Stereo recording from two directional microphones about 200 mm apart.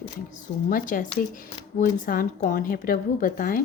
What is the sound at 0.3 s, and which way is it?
Speech, 40° left (ahead or behind).